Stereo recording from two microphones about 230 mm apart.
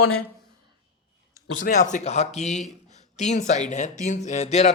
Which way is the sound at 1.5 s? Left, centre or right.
Left.